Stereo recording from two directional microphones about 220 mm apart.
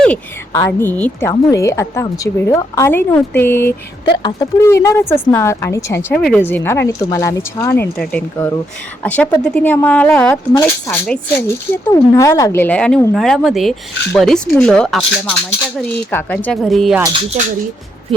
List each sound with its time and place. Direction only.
0.0 s speech: 10° left (ahead or behind)
4.0 s speech: 20° left (ahead or behind); by 17.0 s centre (ahead or behind)
17.4 s speech: 30° right (ahead or behind)